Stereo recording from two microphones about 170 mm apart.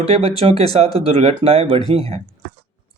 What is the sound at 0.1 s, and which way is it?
Speech, 35° right (ahead or behind).